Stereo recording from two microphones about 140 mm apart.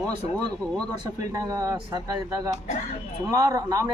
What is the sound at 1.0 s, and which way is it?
A man's voice, 25° right (ahead or behind).